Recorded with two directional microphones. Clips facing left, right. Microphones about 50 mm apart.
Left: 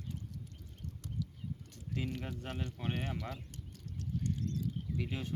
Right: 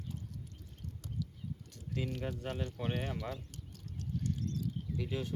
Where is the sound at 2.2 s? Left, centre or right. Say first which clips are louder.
Right 3 dB; centre.